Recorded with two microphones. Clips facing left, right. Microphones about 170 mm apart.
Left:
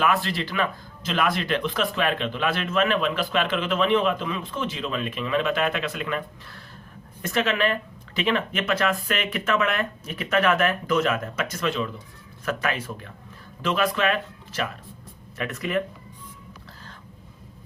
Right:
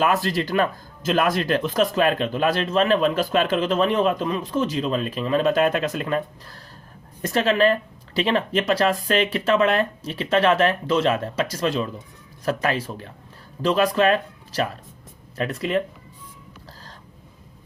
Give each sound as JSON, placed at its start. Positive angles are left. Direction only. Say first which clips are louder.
{"t": 0.0, "sound": "speech", "louder": "right 3 dB", "side_deg": -40}